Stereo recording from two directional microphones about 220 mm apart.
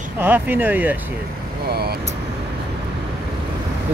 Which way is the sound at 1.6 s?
45° right (ahead or behind).